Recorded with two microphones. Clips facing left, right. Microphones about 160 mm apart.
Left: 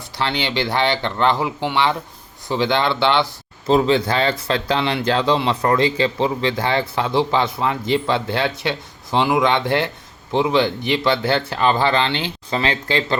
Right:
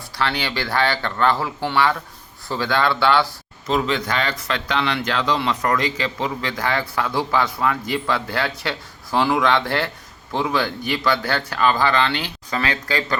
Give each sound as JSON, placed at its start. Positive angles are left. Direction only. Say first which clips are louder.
{"t": 0.2, "sound": "speech", "louder": "left 2 dB", "side_deg": 25}